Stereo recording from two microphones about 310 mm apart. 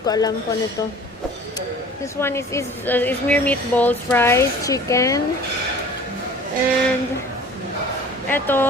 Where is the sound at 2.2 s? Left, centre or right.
Centre.